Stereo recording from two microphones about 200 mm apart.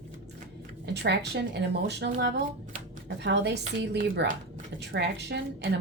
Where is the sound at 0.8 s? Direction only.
60° right (ahead or behind).